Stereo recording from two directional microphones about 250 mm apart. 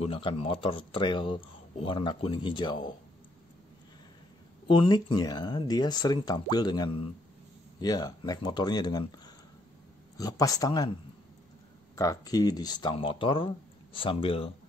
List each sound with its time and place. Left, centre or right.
0.0 s a man's voice: left
4.6 s speech: centre
11.9 s a man's voice: centre